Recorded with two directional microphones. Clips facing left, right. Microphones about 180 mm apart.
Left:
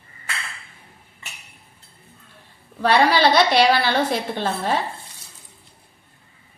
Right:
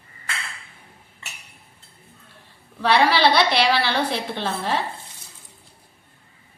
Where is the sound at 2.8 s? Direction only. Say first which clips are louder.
Left 1 dB; 45° left (ahead or behind).